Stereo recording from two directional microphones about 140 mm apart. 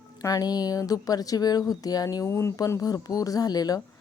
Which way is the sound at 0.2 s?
25° left (ahead or behind).